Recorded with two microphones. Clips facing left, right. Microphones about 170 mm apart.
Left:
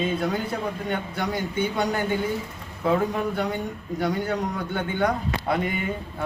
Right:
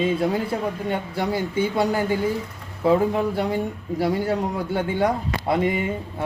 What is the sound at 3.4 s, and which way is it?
A man's voice, 30° right (ahead or behind).